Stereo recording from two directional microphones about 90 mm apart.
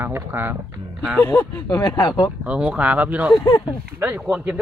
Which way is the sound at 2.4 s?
15° right (ahead or behind).